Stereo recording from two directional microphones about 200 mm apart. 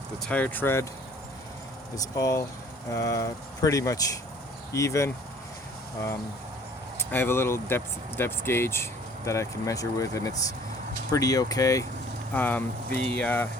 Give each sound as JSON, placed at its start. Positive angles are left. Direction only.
{"t": 0.3, "sound": "speech", "side_deg": 5}
{"t": 2.0, "sound": "speech", "side_deg": 15}
{"t": 7.0, "sound": "speech", "side_deg": 10}